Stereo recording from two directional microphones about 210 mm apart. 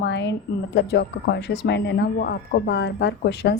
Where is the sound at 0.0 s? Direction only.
55° left (ahead or behind).